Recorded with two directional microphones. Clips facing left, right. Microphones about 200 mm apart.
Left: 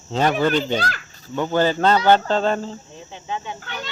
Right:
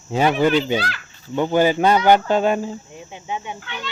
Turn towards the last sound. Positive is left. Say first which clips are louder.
# left 1 dB
turn(degrees=40)  # may be behind; listen again after turning